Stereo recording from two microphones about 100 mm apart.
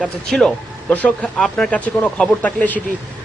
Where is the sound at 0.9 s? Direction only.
15° left (ahead or behind).